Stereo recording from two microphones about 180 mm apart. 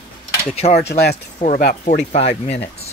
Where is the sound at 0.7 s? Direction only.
65° left (ahead or behind).